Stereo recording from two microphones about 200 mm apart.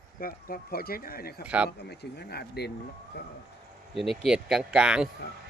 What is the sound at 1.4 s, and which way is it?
Speech, 5° right (ahead or behind).